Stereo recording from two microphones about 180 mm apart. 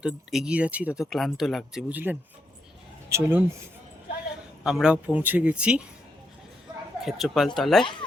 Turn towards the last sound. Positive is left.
turn(degrees=0)  # may be behind; listen again after turning